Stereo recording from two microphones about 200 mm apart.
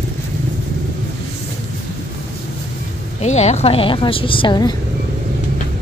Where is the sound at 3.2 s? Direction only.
35° left (ahead or behind).